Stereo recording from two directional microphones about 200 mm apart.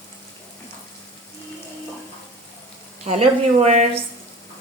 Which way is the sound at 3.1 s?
30° right (ahead or behind).